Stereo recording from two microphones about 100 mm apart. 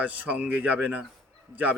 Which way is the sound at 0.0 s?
15° right (ahead or behind).